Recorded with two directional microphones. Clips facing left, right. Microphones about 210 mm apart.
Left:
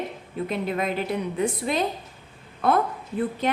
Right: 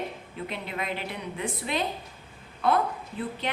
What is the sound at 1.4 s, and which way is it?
A woman's voice, 40° left (ahead or behind).